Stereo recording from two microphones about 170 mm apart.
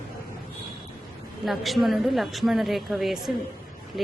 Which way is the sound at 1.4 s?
Centre (ahead or behind).